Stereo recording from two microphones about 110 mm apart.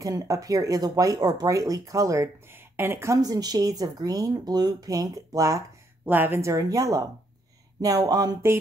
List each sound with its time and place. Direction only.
0.0 s speech: 30° right (ahead or behind)
6.0 s a woman's voice: 20° right (ahead or behind); by 8.4 s 35° right (ahead or behind)